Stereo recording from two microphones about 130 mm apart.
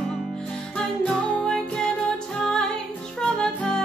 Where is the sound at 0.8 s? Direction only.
5° left (ahead or behind).